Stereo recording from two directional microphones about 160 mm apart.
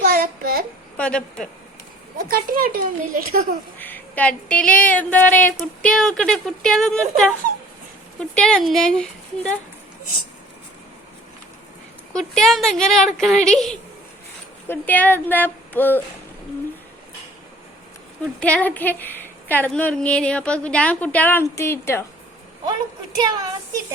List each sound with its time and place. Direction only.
0.0 s child singing: 70° right (ahead or behind)
0.9 s speech: 5° left (ahead or behind)
2.1 s speech: 65° right (ahead or behind)
3.8 s a woman's voice: 10° left (ahead or behind)
12.1 s a woman's voice: 5° left (ahead or behind)
18.3 s speech: 10° left (ahead or behind)
23.2 s speech: 25° right (ahead or behind)